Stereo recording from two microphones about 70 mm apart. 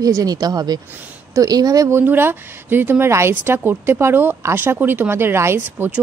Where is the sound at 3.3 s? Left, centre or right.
Right.